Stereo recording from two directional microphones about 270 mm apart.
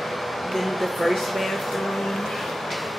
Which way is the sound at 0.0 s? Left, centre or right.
Centre.